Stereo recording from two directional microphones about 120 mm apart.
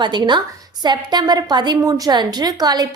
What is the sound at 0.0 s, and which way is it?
A woman's voice, 40° right (ahead or behind).